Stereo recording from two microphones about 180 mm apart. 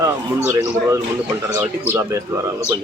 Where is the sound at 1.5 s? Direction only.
15° right (ahead or behind).